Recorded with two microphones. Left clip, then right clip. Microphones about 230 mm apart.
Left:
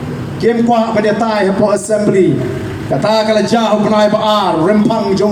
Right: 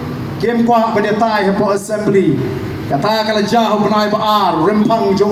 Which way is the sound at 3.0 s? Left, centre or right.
Left.